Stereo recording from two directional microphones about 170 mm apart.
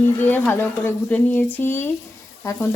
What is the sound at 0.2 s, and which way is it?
Frying, 10° left (ahead or behind).